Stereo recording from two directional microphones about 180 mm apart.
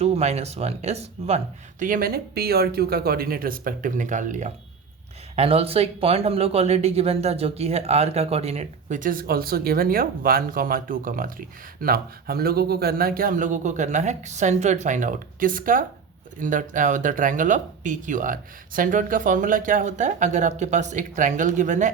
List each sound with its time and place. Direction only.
0.0 s speech: 35° right (ahead or behind)
1.8 s speech: 50° right (ahead or behind)